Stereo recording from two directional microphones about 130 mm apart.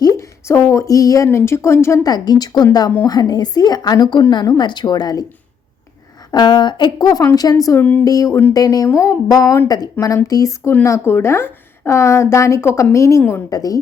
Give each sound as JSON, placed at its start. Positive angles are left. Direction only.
{"t": 0.0, "sound": "speech", "side_deg": 25}
{"t": 2.1, "sound": "a woman's voice", "side_deg": 30}
{"t": 6.3, "sound": "speech", "side_deg": 35}